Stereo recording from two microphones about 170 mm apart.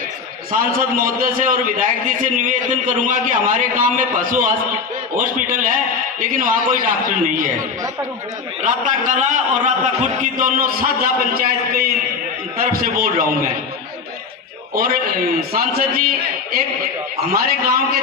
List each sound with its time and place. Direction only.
0.6 s a man's voice: 55° right (ahead or behind)
8.6 s a man's voice: 50° right (ahead or behind)
15.5 s a man's voice: 60° right (ahead or behind)
17.3 s a man's voice: 60° right (ahead or behind)